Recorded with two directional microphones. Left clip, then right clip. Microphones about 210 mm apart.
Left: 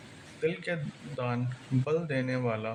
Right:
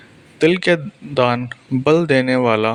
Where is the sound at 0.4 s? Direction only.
45° right (ahead or behind).